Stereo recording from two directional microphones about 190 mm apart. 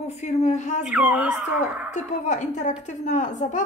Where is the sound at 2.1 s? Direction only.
40° left (ahead or behind).